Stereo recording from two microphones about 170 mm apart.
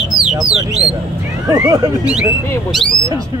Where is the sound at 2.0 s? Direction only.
5° right (ahead or behind).